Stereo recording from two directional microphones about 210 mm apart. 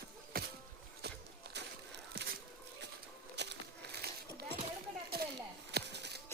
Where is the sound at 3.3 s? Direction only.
50° right (ahead or behind).